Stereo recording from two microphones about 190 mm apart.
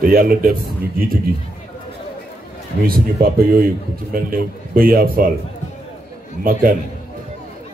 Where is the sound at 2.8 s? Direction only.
50° right (ahead or behind).